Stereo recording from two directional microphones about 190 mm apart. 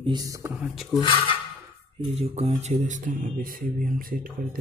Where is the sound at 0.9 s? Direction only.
25° left (ahead or behind).